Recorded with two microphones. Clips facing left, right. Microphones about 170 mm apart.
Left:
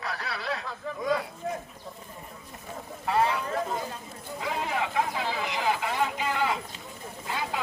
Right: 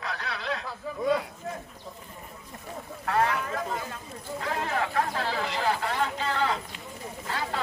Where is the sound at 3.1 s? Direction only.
25° left (ahead or behind).